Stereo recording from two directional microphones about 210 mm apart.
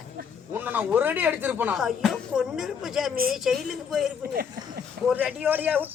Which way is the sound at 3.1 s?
45° right (ahead or behind).